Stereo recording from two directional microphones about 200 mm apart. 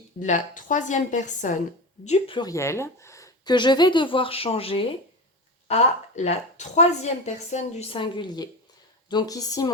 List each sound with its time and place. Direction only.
0.2 s a woman's voice: 40° left (ahead or behind)
6.1 s a woman's voice: 35° left (ahead or behind); by 9.6 s 15° left (ahead or behind)